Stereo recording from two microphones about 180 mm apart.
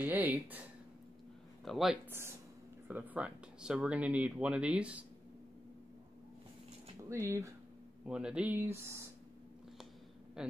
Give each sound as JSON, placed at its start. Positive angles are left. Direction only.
{"t": 0.0, "sound": "speech", "side_deg": -10}
{"t": 2.0, "sound": "speech", "side_deg": -15}
{"t": 7.1, "sound": "speech", "side_deg": -15}
{"t": 8.1, "sound": "speech", "side_deg": -5}